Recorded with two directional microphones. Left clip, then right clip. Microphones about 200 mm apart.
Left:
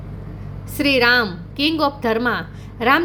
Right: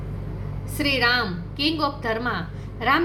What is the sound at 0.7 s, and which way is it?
A woman's voice, 50° left (ahead or behind).